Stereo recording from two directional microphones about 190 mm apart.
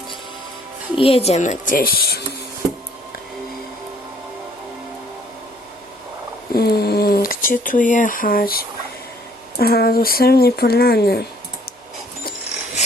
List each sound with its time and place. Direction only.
0.9 s speech: 30° left (ahead or behind); by 2.2 s 55° left (ahead or behind)
6.5 s a sound: 55° left (ahead or behind)
9.6 s speech: 55° left (ahead or behind)